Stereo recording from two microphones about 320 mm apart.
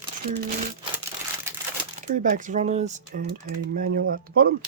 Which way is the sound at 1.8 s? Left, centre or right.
Right.